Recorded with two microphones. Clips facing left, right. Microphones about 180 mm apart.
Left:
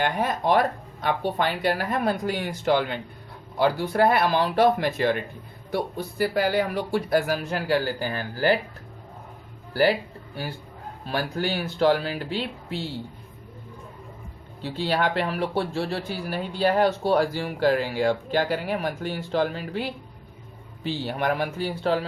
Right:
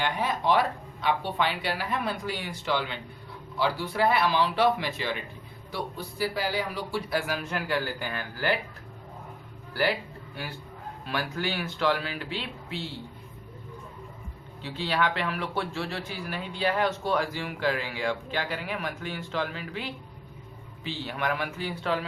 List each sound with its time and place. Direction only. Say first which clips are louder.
0.0 s speech: left 3 dB; 50° left (ahead or behind)
11.0 s speech: left 4 dB; 35° left (ahead or behind)
14.8 s speech: left 3 dB; 40° left (ahead or behind)
21.0 s speech: left 4 dB; 40° left (ahead or behind)